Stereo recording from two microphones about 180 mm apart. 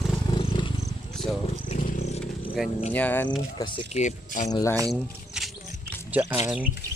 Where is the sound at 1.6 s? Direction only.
45° left (ahead or behind).